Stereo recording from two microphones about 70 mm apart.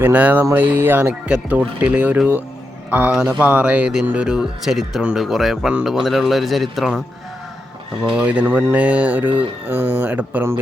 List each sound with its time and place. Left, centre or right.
0.0 s speech: right; by 7.0 s centre
8.1 s speech: right